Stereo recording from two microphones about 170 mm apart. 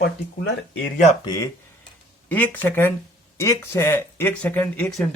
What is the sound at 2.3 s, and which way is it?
Speech, 10° left (ahead or behind).